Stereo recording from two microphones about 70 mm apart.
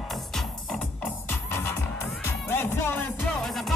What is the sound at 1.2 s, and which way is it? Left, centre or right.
Music, left.